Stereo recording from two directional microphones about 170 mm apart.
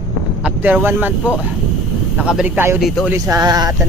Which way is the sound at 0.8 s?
10° right (ahead or behind).